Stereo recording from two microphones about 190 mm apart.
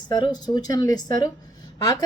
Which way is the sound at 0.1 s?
20° left (ahead or behind).